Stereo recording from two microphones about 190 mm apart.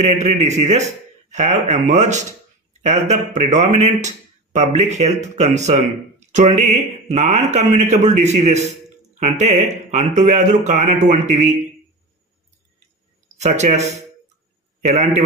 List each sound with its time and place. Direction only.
0.0 s speech: 35° right (ahead or behind)
13.4 s a man's voice: 35° right (ahead or behind)